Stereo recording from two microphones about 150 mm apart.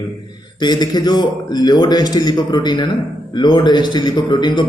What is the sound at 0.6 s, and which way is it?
A man's voice, 30° left (ahead or behind).